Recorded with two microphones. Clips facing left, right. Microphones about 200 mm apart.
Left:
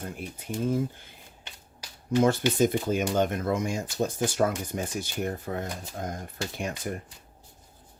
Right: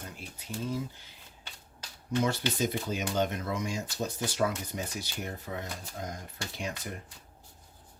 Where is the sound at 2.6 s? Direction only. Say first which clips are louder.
Left 7 dB; 50° left (ahead or behind).